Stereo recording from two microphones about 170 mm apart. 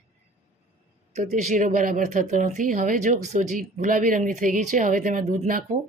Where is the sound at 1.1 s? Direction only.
45° right (ahead or behind).